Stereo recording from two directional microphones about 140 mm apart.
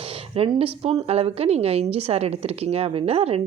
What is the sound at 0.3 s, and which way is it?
A woman's voice, 45° right (ahead or behind).